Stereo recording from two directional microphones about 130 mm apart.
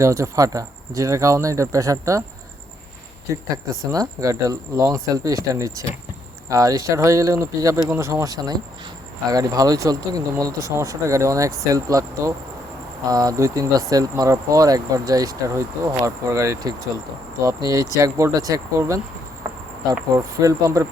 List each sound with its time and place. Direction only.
0.0 s speech: 25° right (ahead or behind)
3.3 s speech: 20° right (ahead or behind)